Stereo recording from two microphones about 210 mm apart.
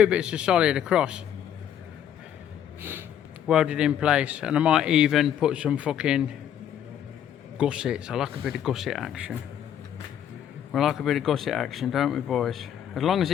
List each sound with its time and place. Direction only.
0.0 s speech: 5° right (ahead or behind)
3.4 s speech: 5° right (ahead or behind)
7.6 s speech: 5° right (ahead or behind)
10.7 s speech: centre (ahead or behind)